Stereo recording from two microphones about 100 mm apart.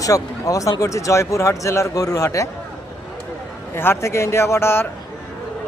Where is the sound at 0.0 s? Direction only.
35° left (ahead or behind).